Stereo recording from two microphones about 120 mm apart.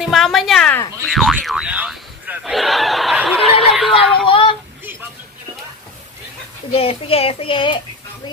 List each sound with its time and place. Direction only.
0.0 s a woman's voice: centre (ahead or behind)
1.4 s a sound: 5° right (ahead or behind)
3.3 s snicker: centre (ahead or behind)
4.3 s child singing: 45° left (ahead or behind)
6.7 s a child's voice: 50° left (ahead or behind)